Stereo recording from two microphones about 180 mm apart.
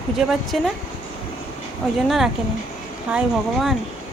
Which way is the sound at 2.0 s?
Centre (ahead or behind).